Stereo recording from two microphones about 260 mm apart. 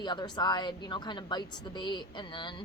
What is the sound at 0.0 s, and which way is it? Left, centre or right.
A woman's voice, centre.